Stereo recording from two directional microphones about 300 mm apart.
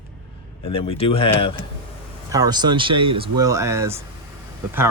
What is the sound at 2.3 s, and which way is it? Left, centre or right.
Speech, centre.